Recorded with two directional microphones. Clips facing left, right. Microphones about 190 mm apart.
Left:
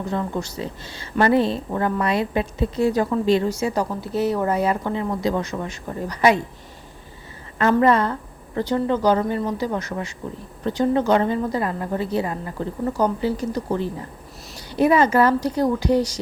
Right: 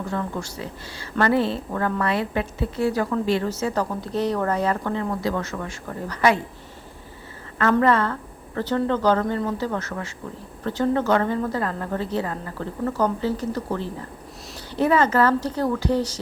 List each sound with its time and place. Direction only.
0.1 s a woman's voice: 20° left (ahead or behind)
7.6 s a woman's voice: 20° left (ahead or behind)